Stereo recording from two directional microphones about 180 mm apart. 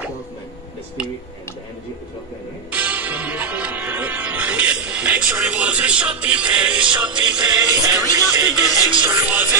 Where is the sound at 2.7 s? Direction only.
10° right (ahead or behind).